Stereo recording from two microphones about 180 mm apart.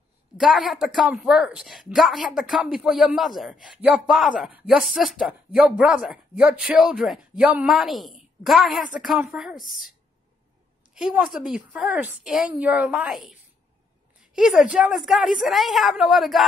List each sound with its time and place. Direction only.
0.4 s speech: centre (ahead or behind)
11.0 s speech: 5° right (ahead or behind)